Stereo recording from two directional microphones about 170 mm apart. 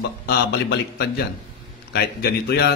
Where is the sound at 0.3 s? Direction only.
80° left.